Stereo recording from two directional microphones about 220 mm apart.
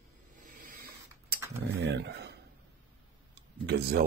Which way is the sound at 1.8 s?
50° right (ahead or behind).